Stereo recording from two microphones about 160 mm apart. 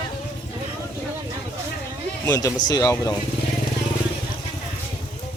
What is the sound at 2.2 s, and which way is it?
Speech, 20° left (ahead or behind).